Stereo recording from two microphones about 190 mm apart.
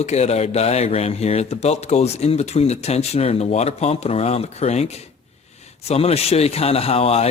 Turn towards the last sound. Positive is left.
turn(degrees=30)  # may be behind; listen again after turning